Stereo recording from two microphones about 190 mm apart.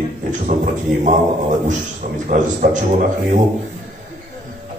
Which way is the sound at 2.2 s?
40° right (ahead or behind).